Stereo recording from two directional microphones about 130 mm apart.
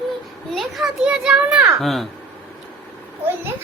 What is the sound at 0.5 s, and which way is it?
A child's voice, centre (ahead or behind).